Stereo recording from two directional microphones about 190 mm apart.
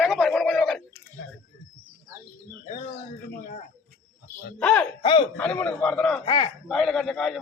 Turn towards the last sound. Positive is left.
turn(degrees=0)  # may be behind; listen again after turning